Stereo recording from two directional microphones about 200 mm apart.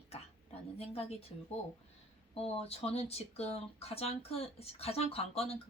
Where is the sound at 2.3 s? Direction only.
30° left (ahead or behind).